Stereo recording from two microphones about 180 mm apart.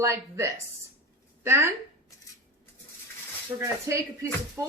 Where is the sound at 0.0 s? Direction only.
15° right (ahead or behind).